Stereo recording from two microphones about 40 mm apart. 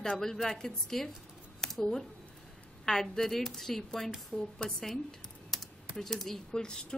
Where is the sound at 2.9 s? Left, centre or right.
Centre.